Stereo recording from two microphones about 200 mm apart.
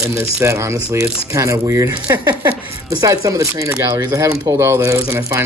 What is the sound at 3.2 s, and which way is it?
Speech, 15° right (ahead or behind).